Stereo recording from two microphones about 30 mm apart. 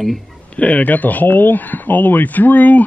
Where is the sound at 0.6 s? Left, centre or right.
Left.